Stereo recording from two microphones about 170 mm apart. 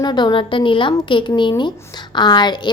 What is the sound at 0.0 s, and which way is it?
A woman's voice, 25° left (ahead or behind).